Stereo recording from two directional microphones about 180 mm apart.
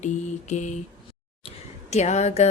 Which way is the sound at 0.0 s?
40° left (ahead or behind).